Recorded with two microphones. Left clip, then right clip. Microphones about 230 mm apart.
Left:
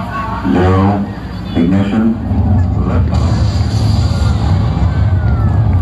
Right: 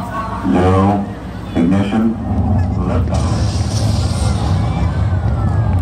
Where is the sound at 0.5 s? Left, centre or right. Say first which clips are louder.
Even; right.